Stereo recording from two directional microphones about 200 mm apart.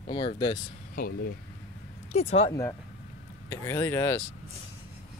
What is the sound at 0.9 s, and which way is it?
Speech, 45° left (ahead or behind).